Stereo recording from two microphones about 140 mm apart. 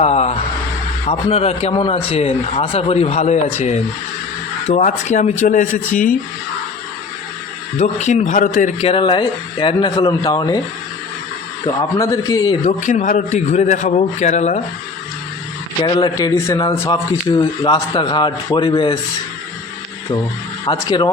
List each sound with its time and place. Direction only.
0.0 s a man's voice: 50° left (ahead or behind); by 6.1 s 70° left (ahead or behind)
7.8 s a man's voice: 55° left (ahead or behind)
8.8 s a man's voice: 40° left (ahead or behind)
11.6 s a man's voice: 25° left (ahead or behind)
12.8 s a man's voice: 60° left (ahead or behind)
15.8 s a man's voice: 30° left (ahead or behind)
20.7 s a man's voice: 30° left (ahead or behind)